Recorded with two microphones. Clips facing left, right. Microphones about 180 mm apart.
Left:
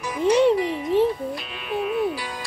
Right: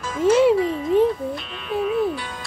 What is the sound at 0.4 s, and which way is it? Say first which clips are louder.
Music: right 2 dB; 5° right (ahead or behind).